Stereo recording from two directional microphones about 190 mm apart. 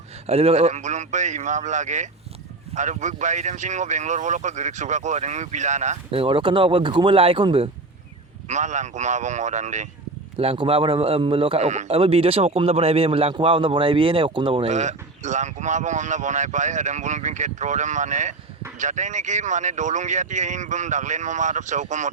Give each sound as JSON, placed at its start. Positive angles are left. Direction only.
{"t": 0.3, "sound": "speech", "side_deg": -30}
{"t": 8.4, "sound": "speech", "side_deg": -40}